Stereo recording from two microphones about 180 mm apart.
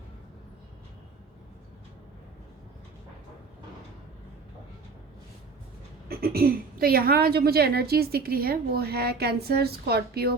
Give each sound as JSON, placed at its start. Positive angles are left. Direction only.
{"t": 6.1, "sound": "a woman's voice", "side_deg": -55}